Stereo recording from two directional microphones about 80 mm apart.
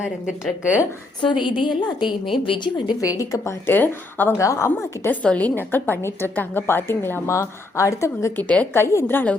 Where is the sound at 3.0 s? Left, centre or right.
Left.